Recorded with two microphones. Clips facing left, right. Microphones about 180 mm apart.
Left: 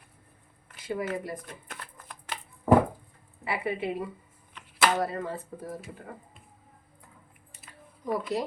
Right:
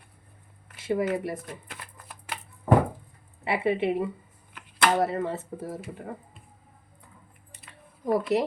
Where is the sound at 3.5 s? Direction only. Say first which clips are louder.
Right 6 dB; 25° right (ahead or behind).